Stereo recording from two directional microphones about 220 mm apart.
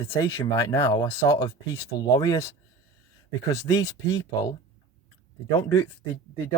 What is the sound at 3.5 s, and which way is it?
Speech, 15° left (ahead or behind).